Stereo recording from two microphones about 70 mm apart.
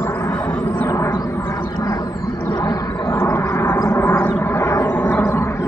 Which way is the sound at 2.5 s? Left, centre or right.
Left.